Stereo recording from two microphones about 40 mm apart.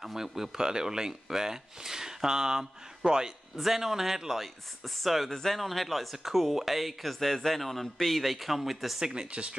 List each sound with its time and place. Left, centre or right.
0.0 s speech: centre
3.5 s speech: centre
5.3 s speech: centre
5.6 s speech: centre
9.0 s speech: centre